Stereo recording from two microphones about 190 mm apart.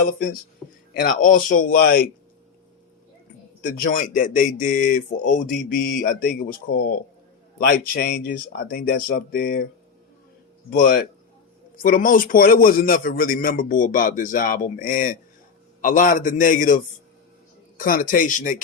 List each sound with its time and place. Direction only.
0.6 s speech: centre (ahead or behind)
0.9 s a man's voice: 45° left (ahead or behind)
3.6 s a man's voice: 45° left (ahead or behind)
10.7 s a man's voice: 45° left (ahead or behind)